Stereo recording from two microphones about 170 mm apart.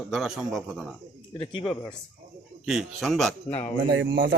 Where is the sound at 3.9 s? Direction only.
90° right.